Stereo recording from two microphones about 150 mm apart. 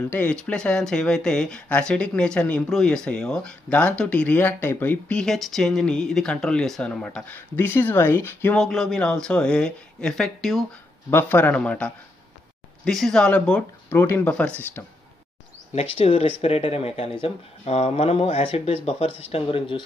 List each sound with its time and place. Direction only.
0.1 s speech: 10° left (ahead or behind)
11.1 s speech: 15° left (ahead or behind)
15.7 s speech: 45° left (ahead or behind)